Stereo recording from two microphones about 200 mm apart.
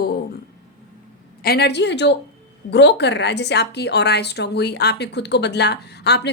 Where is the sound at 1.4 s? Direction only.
55° left (ahead or behind).